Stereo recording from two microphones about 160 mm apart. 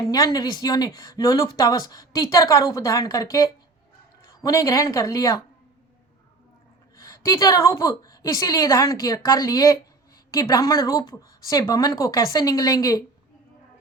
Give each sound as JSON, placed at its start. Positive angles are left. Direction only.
{"t": 0.0, "sound": "speech", "side_deg": 20}
{"t": 6.9, "sound": "speech", "side_deg": 20}